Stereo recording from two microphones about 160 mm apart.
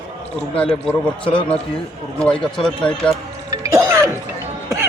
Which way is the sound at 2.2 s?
5° left (ahead or behind).